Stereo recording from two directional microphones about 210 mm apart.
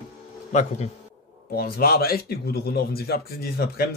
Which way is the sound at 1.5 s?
45° left (ahead or behind).